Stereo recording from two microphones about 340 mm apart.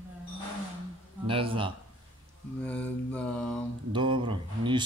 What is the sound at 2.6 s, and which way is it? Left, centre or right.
Mantra, centre.